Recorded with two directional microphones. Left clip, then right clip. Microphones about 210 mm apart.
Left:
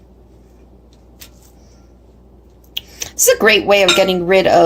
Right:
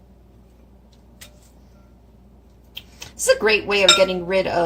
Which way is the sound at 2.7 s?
50° left (ahead or behind).